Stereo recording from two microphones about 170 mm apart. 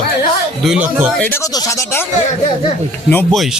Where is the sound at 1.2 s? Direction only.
10° left (ahead or behind).